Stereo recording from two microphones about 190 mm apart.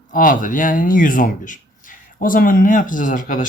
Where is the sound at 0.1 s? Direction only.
45° left (ahead or behind).